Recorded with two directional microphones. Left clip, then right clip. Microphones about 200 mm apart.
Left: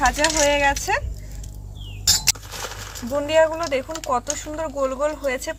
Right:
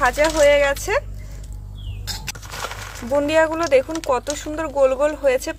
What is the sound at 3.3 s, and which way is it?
Speech, 50° right (ahead or behind).